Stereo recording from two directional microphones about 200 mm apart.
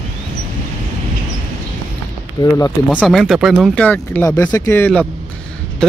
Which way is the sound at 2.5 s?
10° left (ahead or behind).